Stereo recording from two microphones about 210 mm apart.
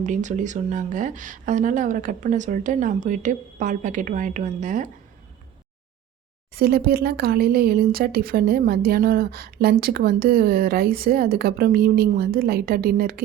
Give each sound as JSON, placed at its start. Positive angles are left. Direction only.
{"t": 0.0, "sound": "speech", "side_deg": -35}
{"t": 6.5, "sound": "speech", "side_deg": -45}